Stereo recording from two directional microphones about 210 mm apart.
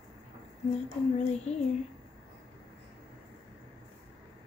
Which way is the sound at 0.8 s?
30° left (ahead or behind).